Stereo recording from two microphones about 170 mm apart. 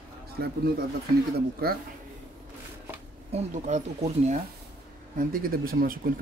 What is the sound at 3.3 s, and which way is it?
Speech, 40° right (ahead or behind).